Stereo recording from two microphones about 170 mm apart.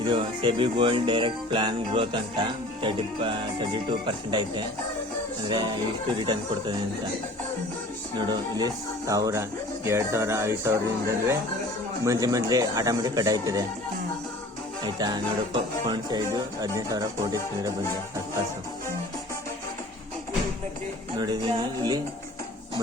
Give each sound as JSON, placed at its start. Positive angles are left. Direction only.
{"t": 0.0, "sound": "music", "side_deg": -30}
{"t": 8.3, "sound": "speech", "side_deg": -25}
{"t": 12.0, "sound": "music", "side_deg": -20}
{"t": 14.8, "sound": "music", "side_deg": -25}
{"t": 21.2, "sound": "music", "side_deg": -25}